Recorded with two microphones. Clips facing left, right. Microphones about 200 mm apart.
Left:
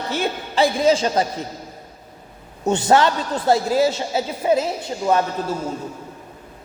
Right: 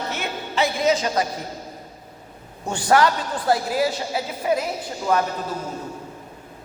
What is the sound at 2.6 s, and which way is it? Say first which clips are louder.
A man's voice: left 2 dB; 25° left (ahead or behind).